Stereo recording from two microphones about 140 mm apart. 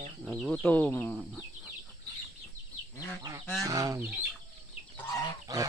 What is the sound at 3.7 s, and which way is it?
Speech, 25° right (ahead or behind).